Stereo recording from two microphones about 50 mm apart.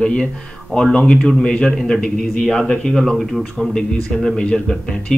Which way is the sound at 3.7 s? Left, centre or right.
Centre.